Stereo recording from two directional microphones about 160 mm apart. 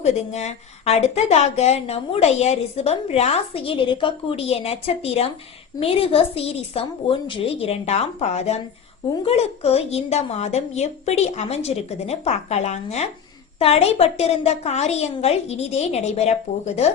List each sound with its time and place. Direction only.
0.0 s a woman's voice: 45° left (ahead or behind)